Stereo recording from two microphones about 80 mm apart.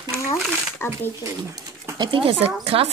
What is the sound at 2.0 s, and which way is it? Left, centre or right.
Speech, right.